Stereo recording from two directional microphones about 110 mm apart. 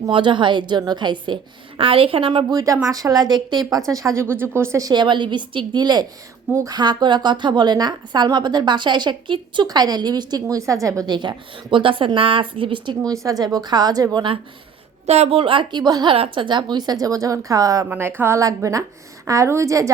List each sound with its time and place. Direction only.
0.1 s a woman's voice: 45° right (ahead or behind)
2.4 s a woman's voice: 35° right (ahead or behind)
4.9 s a woman's voice: 45° right (ahead or behind)
6.5 s a woman's voice: 25° right (ahead or behind)
6.7 s a woman's voice: 40° right (ahead or behind)
11.0 s a woman's voice: 45° right (ahead or behind)
13.2 s a woman's voice: 35° right (ahead or behind)
15.0 s a woman's voice: 80° right; by 16.1 s 40° right (ahead or behind)
16.1 s a woman's voice: 55° right (ahead or behind); by 17.8 s 30° right (ahead or behind)
17.8 s a woman's voice: 20° right (ahead or behind)